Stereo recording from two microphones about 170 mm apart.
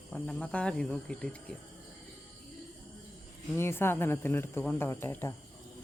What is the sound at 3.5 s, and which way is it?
Speech, 15° left (ahead or behind).